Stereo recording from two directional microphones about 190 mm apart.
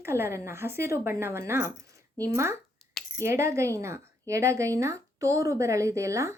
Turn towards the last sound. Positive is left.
turn(degrees=-15)  # may be behind; listen again after turning